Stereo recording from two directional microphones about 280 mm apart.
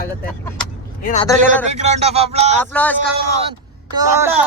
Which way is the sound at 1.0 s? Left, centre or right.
Left.